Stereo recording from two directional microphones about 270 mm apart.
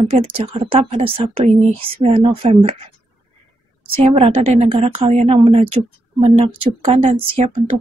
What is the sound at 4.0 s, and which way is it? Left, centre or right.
A woman's voice, right.